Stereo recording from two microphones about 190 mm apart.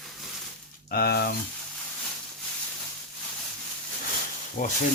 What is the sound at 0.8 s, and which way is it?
Speech, 55° left (ahead or behind).